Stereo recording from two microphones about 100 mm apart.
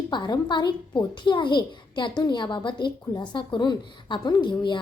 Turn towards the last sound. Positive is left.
turn(degrees=50)  # may be behind; listen again after turning